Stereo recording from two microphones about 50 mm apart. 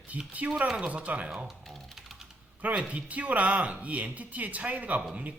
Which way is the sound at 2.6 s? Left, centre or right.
Right.